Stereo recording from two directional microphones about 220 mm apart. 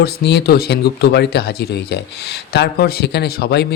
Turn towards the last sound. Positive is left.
turn(degrees=50)  # may be behind; listen again after turning